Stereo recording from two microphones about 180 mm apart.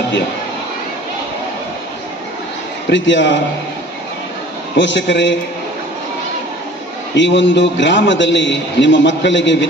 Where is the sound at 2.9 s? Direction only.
90° left.